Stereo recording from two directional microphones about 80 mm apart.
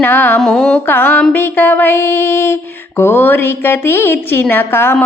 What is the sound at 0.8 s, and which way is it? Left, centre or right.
Music, left.